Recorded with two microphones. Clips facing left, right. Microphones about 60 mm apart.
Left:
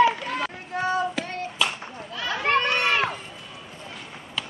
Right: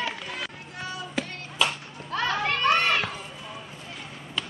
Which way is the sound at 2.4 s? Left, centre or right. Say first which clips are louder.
Left 2 dB; left.